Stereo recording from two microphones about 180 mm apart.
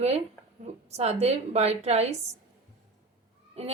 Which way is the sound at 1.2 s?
35° right (ahead or behind).